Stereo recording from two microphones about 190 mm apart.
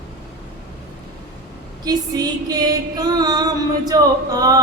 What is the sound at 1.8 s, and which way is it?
Music, 20° right (ahead or behind).